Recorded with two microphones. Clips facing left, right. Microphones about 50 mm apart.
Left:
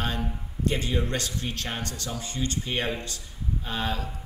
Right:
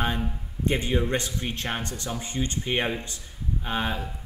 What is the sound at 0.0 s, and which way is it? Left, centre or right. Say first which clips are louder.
A man's voice: right 3 dB; right.